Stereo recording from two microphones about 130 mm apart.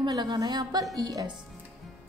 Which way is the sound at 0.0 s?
35° right (ahead or behind).